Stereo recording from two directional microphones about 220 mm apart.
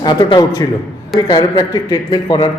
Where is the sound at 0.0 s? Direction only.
20° left (ahead or behind).